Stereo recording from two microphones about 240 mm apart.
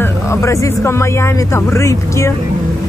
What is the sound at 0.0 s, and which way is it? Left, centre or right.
Speech, centre.